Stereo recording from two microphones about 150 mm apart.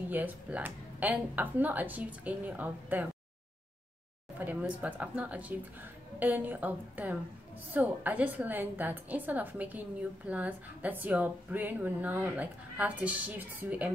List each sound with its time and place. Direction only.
0.1 s a woman's voice: 10° right (ahead or behind)
4.4 s a woman's voice: 10° right (ahead or behind)